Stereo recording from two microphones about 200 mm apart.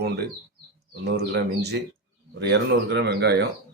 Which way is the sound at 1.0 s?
55° right (ahead or behind).